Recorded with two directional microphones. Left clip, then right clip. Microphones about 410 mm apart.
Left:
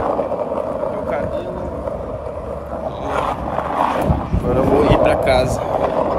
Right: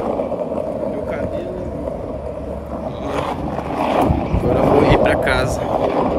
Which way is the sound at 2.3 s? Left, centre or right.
Left.